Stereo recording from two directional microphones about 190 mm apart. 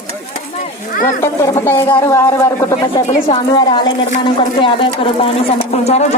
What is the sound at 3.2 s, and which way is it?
Speech, 25° left (ahead or behind).